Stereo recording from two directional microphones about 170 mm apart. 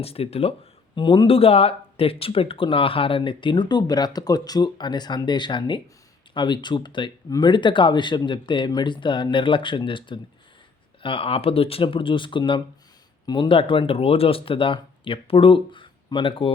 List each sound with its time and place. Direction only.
0.0 s speech: 35° left (ahead or behind)